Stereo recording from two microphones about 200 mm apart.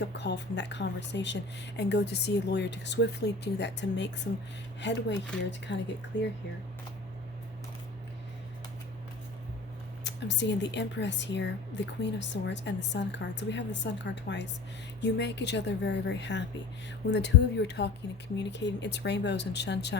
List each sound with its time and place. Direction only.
0.0 s speech: 60° left (ahead or behind)
10.0 s speech: 60° left (ahead or behind)